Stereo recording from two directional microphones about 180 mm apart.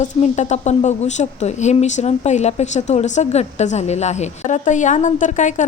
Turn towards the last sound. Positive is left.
turn(degrees=40)  # may be behind; listen again after turning